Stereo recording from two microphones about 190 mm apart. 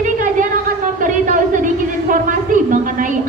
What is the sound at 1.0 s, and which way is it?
A man's voice, 45° right (ahead or behind).